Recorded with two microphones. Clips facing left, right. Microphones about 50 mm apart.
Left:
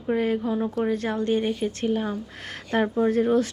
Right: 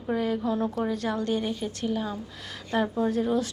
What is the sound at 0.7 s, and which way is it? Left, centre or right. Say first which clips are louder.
A woman's voice: left 3 dB; left.